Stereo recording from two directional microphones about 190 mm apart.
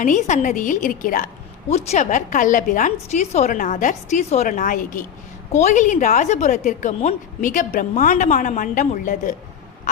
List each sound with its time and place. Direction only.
0.0 s a woman's voice: 40° left (ahead or behind)